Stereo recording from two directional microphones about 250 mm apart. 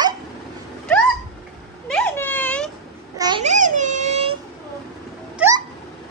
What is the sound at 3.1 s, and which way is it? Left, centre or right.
Babbling, centre.